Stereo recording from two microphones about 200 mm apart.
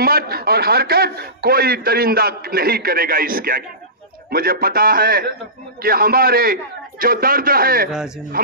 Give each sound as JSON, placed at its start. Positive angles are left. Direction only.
{"t": 0.0, "sound": "a man's voice", "side_deg": -50}